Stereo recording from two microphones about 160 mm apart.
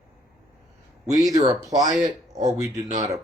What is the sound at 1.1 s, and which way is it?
Speech, 20° right (ahead or behind).